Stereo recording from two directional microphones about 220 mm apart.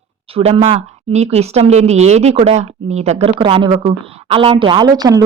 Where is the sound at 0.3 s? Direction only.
25° right (ahead or behind).